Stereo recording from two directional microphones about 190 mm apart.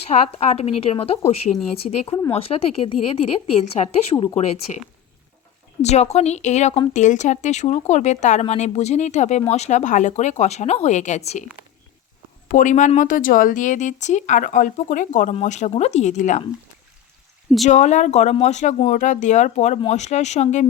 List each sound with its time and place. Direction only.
0.1 s speech: 35° left (ahead or behind)
5.8 s speech: 35° left (ahead or behind)
12.5 s speech: 40° left (ahead or behind)
17.7 s speech: 40° left (ahead or behind)